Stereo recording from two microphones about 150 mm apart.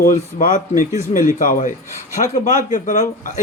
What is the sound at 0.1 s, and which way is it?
Speech, 60° left (ahead or behind).